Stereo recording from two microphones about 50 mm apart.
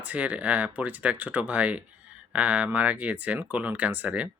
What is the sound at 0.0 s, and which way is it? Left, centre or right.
Speech, right.